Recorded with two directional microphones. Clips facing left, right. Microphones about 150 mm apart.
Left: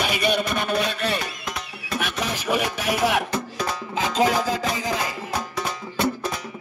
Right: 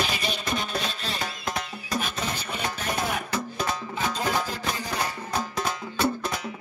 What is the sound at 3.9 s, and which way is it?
Music, 90° left.